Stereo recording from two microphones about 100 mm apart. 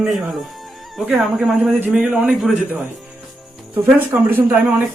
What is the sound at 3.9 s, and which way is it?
Speech, 20° right (ahead or behind).